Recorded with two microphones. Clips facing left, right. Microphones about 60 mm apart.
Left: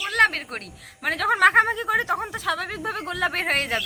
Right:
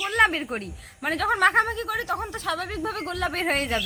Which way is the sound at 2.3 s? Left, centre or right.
Centre.